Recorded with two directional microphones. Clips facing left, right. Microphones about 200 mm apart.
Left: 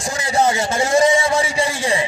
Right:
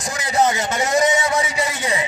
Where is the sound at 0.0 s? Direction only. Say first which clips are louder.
Left 1 dB; 30° left (ahead or behind).